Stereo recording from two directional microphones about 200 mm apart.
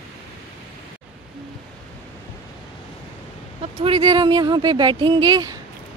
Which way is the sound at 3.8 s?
25° right (ahead or behind).